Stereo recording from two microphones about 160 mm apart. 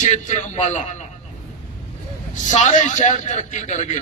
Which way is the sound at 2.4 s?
50° left (ahead or behind).